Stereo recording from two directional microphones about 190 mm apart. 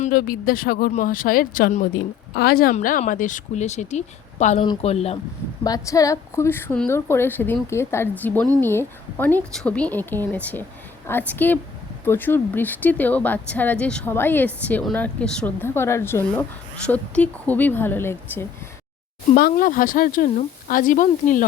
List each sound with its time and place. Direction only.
0.0 s speech: 50° left (ahead or behind)
2.7 s a woman's voice: 40° left (ahead or behind)
5.6 s speech: 20° left (ahead or behind)
19.3 s speech: 45° left (ahead or behind)